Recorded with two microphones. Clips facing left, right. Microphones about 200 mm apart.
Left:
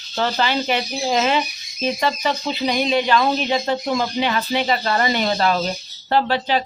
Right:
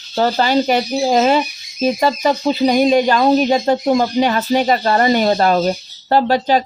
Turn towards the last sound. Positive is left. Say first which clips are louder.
# right 5 dB
turn(degrees=-45)  # may be behind; listen again after turning